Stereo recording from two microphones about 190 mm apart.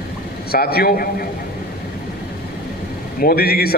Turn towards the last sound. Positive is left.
turn(degrees=55)  # may be behind; listen again after turning